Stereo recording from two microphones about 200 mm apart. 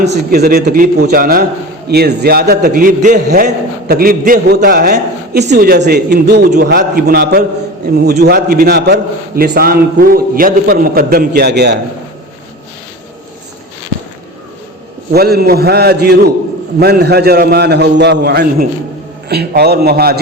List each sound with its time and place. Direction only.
0.0 s a man's voice: 55° right (ahead or behind)
15.1 s a man's voice: 50° right (ahead or behind)